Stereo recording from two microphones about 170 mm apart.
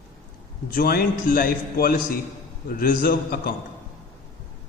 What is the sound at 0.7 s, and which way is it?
A man's voice, 60° left (ahead or behind).